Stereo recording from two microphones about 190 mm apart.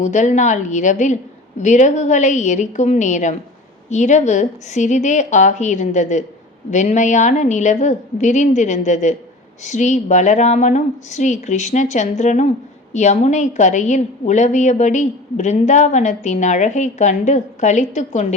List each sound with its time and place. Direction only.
0.0 s a woman's voice: 40° left (ahead or behind)